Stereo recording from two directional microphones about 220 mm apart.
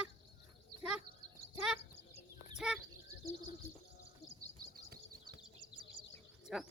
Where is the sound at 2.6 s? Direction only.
5° right (ahead or behind).